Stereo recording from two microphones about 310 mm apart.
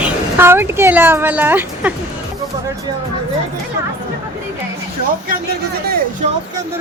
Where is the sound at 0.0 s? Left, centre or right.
Centre.